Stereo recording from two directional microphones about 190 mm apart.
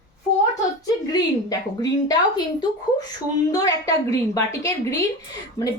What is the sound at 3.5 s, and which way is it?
A woman's voice, 20° left (ahead or behind).